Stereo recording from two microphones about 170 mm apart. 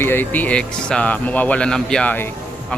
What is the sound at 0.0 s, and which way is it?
Speech, 10° left (ahead or behind).